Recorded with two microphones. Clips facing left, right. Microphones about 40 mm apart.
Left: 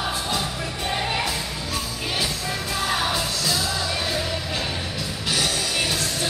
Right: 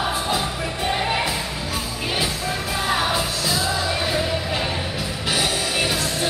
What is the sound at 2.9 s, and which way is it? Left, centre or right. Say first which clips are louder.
Music: right 3 dB; centre.